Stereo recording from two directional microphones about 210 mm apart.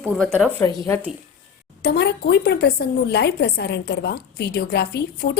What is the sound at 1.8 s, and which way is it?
A woman's voice, 50° left (ahead or behind).